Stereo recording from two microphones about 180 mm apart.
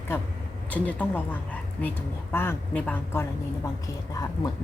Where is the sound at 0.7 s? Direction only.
10° left (ahead or behind).